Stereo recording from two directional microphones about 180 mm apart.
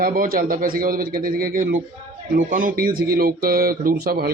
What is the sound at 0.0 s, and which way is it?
Speech, 55° right (ahead or behind).